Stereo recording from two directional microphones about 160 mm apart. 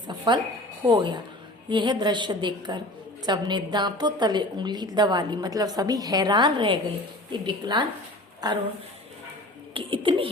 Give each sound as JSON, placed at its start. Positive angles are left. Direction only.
{"t": 0.3, "sound": "a woman's voice", "side_deg": -30}
{"t": 9.7, "sound": "speech", "side_deg": -35}